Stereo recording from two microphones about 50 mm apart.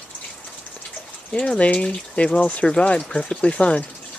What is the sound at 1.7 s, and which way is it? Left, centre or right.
Speech, left.